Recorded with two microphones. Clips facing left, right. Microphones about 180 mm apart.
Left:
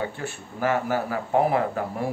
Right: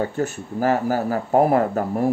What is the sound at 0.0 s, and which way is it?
Speech, 40° right (ahead or behind).